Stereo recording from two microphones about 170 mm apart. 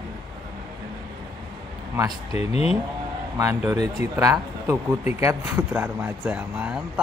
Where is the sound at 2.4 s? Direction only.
35° left (ahead or behind).